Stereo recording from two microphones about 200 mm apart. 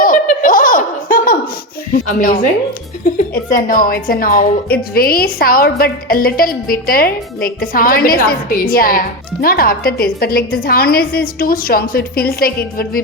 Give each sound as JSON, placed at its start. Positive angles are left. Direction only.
{"t": 0.0, "sound": "chuckle", "side_deg": 45}
{"t": 1.9, "sound": "a woman's voice", "side_deg": 40}